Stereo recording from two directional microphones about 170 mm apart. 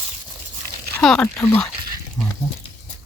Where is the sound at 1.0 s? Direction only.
5° left (ahead or behind).